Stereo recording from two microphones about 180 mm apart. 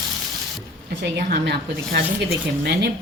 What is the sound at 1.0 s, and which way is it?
A woman's voice, 65° right (ahead or behind).